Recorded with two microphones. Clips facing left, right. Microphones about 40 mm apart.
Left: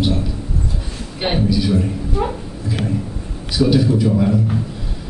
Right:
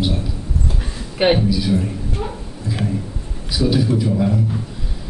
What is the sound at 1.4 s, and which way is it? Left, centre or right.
Speech, centre.